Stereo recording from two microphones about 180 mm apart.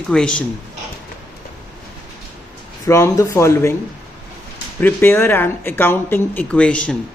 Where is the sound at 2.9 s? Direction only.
15° left (ahead or behind).